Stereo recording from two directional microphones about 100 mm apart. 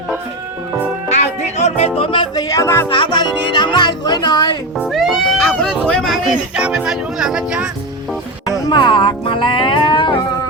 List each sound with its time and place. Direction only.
1.4 s music: 90° left
2.0 s music: 60° left (ahead or behind); by 2.8 s 30° left (ahead or behind)
2.9 s music: 55° left (ahead or behind)
4.9 s cat: centre (ahead or behind)
5.8 s chatter: 5° left (ahead or behind)
6.6 s speech: 10° right (ahead or behind)
8.4 s music: 45° left (ahead or behind)